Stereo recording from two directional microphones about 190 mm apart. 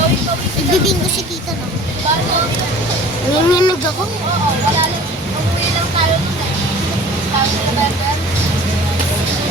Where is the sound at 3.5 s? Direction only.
20° left (ahead or behind).